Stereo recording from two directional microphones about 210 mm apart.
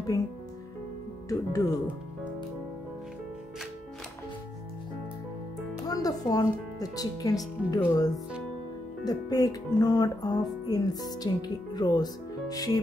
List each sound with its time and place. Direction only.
1.3 s speech: 15° left (ahead or behind)
5.9 s speech: 15° left (ahead or behind)